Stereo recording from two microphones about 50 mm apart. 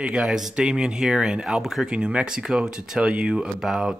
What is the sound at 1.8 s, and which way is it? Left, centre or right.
Speech, right.